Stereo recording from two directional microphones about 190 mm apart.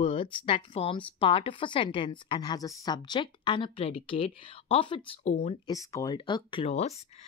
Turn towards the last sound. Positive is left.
turn(degrees=35)  # may be behind; listen again after turning